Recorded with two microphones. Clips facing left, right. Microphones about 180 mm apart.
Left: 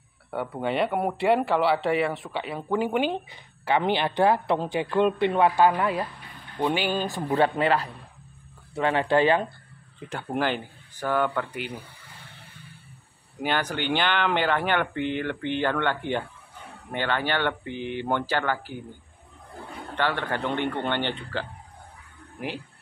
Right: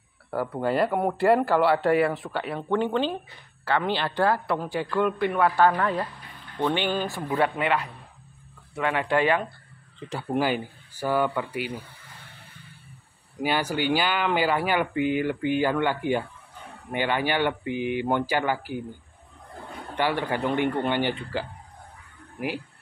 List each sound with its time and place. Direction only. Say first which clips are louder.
0.3 s speech: right 2 dB; centre (ahead or behind); by 7.2 s 15° left (ahead or behind)
7.3 s speech: left 2 dB; 30° left (ahead or behind)
9.9 s speech: right 2 dB; centre (ahead or behind)
13.4 s speech: right 2 dB; 10° right (ahead or behind)
20.0 s speech: right 2 dB; 10° right (ahead or behind)